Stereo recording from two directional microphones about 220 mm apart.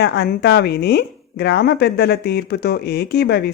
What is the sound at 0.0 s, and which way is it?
Speech, 50° left (ahead or behind).